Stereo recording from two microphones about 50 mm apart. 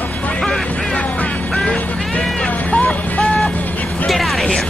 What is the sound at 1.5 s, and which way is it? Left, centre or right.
Vehicle, centre.